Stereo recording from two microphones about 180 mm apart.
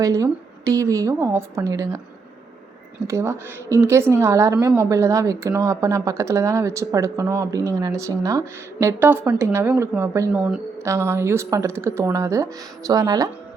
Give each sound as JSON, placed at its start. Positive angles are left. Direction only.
{"t": 0.0, "sound": "speech", "side_deg": -20}
{"t": 3.1, "sound": "speech", "side_deg": -15}